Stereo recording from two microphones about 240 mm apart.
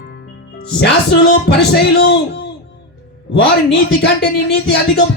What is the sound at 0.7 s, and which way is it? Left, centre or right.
Speech, left.